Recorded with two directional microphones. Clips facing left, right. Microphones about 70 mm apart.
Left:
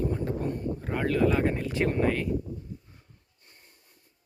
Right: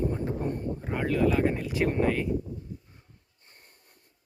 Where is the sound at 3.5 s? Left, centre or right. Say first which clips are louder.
Right 1 dB; right.